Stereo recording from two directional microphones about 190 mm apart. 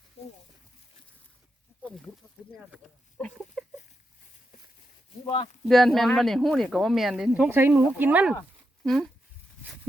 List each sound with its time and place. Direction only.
2.7 s speech: centre (ahead or behind)
5.2 s speech: 25° left (ahead or behind)
5.6 s speech: centre (ahead or behind)